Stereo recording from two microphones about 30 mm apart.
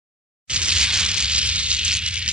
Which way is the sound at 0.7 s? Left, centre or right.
Right.